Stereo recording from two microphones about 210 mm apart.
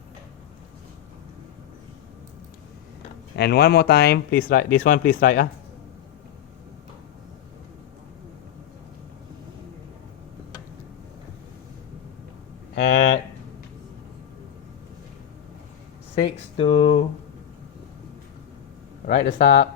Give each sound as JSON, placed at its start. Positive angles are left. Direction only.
{"t": 3.3, "sound": "speech", "side_deg": 50}
{"t": 12.7, "sound": "speech", "side_deg": 55}
{"t": 16.2, "sound": "speech", "side_deg": 30}
{"t": 19.0, "sound": "speech", "side_deg": 55}